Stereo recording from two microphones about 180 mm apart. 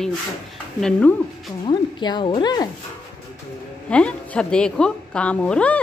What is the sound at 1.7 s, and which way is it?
Speech, 25° left (ahead or behind).